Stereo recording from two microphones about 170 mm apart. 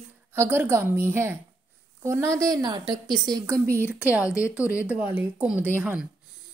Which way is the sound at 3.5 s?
10° left (ahead or behind).